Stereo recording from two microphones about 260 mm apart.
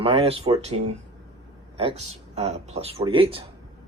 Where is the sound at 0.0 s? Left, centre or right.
Right.